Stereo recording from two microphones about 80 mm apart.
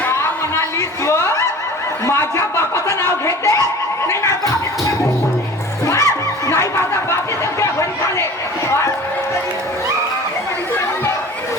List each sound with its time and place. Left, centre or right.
2.0 s speech: left
5.8 s music: left